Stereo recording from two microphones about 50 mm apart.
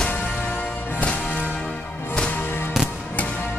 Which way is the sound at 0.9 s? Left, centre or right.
Left.